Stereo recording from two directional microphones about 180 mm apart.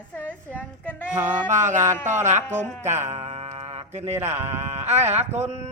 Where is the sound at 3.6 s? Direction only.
40° right (ahead or behind).